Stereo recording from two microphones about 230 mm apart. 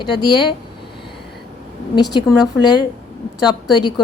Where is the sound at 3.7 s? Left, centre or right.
Centre.